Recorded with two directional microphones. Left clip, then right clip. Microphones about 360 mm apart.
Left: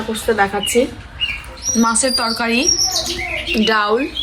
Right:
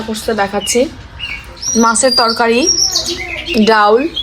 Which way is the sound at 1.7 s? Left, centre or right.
Right.